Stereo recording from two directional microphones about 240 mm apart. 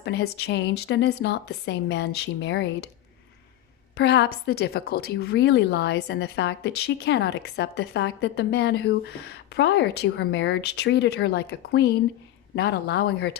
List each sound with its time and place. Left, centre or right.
0.0 s a woman's voice: left
3.9 s a woman's voice: left